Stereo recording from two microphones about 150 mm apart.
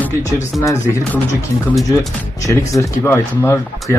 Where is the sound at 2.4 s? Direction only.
20° left (ahead or behind).